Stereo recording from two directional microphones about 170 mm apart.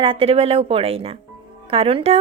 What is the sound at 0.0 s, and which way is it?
A woman's voice, 30° right (ahead or behind).